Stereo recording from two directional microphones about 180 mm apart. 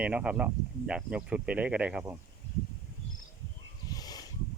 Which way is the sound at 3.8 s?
20° left (ahead or behind).